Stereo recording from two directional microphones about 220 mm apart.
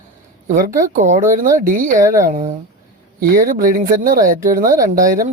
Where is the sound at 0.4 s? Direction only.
35° right (ahead or behind).